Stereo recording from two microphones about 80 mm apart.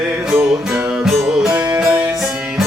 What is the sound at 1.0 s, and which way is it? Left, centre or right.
Music, centre.